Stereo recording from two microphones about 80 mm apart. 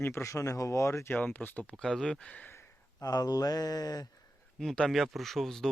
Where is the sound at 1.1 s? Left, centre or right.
Left.